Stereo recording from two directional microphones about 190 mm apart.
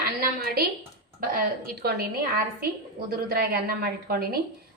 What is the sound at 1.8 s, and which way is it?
Speech, 55° right (ahead or behind).